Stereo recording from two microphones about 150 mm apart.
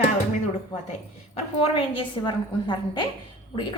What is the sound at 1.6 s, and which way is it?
A woman's voice, 35° left (ahead or behind).